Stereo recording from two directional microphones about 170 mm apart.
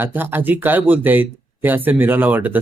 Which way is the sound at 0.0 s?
10° right (ahead or behind).